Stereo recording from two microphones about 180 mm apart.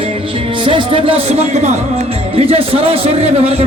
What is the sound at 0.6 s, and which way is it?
Speech, 30° right (ahead or behind).